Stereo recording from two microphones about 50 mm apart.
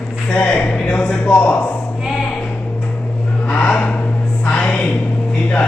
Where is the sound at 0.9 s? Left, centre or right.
Left.